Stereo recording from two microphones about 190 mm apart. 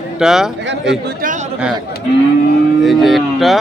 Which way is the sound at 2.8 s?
Centre (ahead or behind).